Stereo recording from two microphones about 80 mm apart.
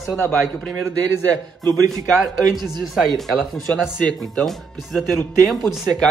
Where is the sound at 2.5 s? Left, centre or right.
Centre.